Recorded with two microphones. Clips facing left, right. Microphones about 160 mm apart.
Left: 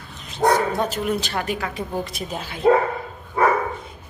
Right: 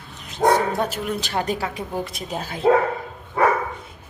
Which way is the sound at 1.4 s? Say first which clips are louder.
Right 2 dB; 30° right (ahead or behind).